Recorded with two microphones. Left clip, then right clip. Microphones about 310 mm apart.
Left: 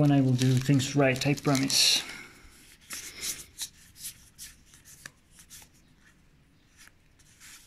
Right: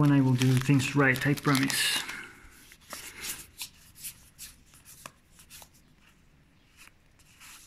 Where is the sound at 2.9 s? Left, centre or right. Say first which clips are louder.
Left 2 dB; centre.